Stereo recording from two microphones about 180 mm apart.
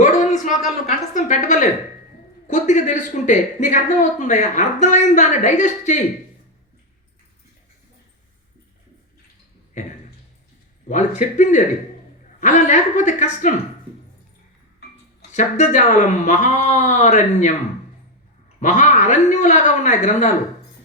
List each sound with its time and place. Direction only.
0.0 s a sound: 45° left (ahead or behind)
1.1 s speech: 45° left (ahead or behind)
10.8 s a woman's voice: 40° left (ahead or behind)
15.3 s speech: 40° left (ahead or behind)
18.6 s speech: 45° left (ahead or behind)